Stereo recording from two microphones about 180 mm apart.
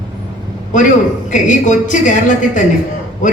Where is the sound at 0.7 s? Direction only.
45° left (ahead or behind).